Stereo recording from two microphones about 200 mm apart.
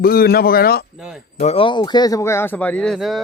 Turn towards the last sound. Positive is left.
turn(degrees=0)  # may be behind; listen again after turning